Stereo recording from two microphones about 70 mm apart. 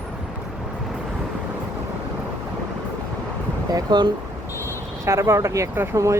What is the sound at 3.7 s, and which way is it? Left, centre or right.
Speech, right.